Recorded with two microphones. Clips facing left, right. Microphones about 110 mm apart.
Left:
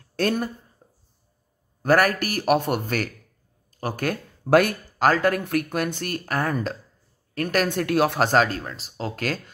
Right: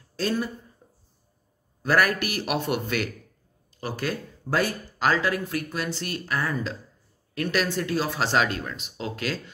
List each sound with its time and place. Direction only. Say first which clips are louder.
0.1 s speech: left 3 dB; 60° left (ahead or behind)
1.8 s speech: left 3 dB; 45° left (ahead or behind)
4.5 s speech: left 8 dB; 60° left (ahead or behind)